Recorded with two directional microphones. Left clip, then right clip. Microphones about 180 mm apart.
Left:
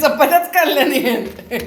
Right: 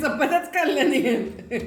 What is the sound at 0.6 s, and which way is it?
Speech, 35° left (ahead or behind).